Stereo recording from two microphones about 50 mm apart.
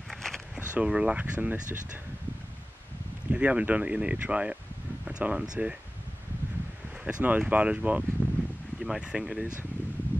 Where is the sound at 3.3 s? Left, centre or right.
Right.